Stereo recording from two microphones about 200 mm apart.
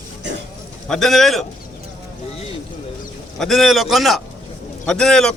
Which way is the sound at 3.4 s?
Centre (ahead or behind).